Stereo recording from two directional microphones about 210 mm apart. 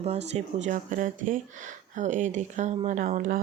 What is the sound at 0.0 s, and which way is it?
Speech, 30° right (ahead or behind).